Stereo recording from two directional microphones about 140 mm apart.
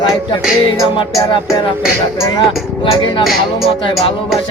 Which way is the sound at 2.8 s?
35° left (ahead or behind).